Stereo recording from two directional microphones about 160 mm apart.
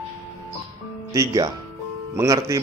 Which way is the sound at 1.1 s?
25° right (ahead or behind).